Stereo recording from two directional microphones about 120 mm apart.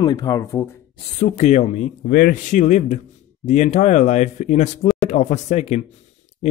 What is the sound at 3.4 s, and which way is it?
Speech, 85° left.